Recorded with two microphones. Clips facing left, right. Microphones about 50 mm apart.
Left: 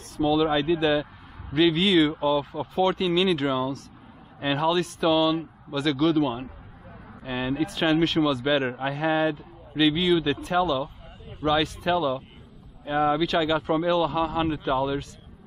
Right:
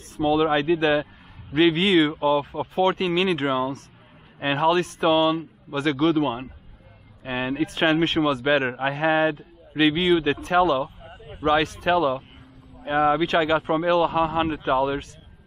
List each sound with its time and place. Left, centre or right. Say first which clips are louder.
0.3 s a man's voice: right 2 dB; right
11.1 s a sound: right 3 dB; right
11.4 s a man's voice: right 3 dB; right
13.8 s a man's voice: right 3 dB; right